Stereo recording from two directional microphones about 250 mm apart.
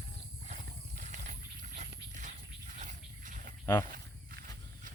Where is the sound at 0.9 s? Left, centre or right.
Right.